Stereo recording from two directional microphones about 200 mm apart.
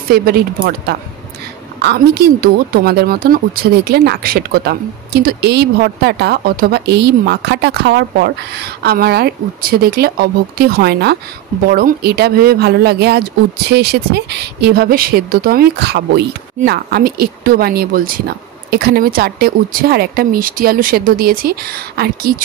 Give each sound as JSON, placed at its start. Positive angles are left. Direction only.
{"t": 0.1, "sound": "a woman's voice", "side_deg": -50}